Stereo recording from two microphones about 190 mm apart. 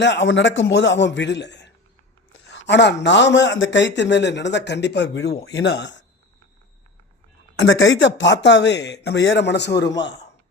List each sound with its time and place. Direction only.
0.0 s a man's voice: 70° left (ahead or behind)
7.6 s speech: 80° left